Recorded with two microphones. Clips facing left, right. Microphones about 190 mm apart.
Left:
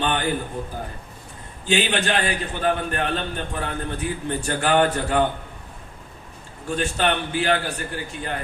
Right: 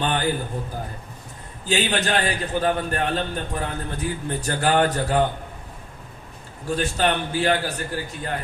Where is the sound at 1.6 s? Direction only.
35° right (ahead or behind).